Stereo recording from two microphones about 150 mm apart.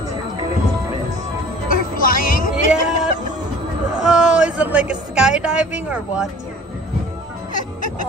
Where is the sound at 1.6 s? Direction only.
70° left (ahead or behind).